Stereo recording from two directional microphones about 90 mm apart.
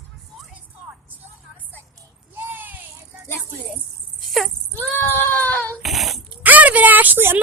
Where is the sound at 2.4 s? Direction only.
25° right (ahead or behind).